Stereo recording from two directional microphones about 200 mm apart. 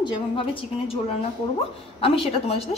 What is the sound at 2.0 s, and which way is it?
Speech, 30° left (ahead or behind).